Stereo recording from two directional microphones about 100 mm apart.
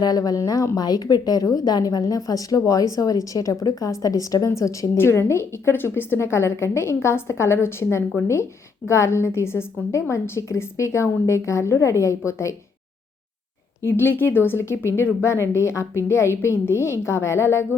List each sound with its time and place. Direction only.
0.0 s a woman's voice: 40° left (ahead or behind)
13.8 s a woman's voice: 25° left (ahead or behind)